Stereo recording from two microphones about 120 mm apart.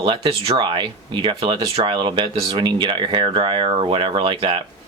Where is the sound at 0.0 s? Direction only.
45° right (ahead or behind).